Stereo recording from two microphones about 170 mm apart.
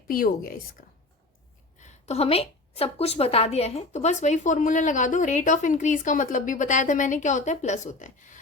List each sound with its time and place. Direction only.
0.1 s a woman's voice: 60° left (ahead or behind)
1.8 s a woman's voice: 40° left (ahead or behind)